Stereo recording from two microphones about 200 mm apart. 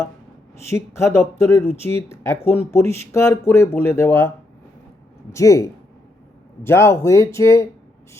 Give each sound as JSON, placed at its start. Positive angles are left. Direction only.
{"t": 0.7, "sound": "speech", "side_deg": 15}
{"t": 5.3, "sound": "speech", "side_deg": 15}